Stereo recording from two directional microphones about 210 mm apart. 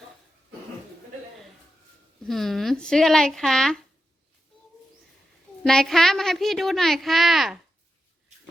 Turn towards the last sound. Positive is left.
turn(degrees=0)  # may be behind; listen again after turning